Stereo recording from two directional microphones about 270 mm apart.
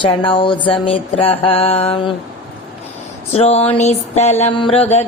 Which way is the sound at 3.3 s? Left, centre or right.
Left.